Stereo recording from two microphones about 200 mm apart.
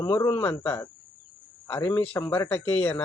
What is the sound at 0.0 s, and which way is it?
Speech, 10° left (ahead or behind).